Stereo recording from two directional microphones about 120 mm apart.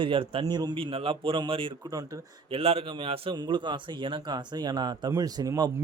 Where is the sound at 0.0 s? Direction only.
50° right (ahead or behind).